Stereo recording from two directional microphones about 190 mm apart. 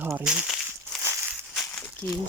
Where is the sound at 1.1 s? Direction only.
10° right (ahead or behind).